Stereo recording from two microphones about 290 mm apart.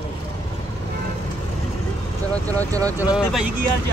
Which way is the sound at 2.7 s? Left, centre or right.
Centre.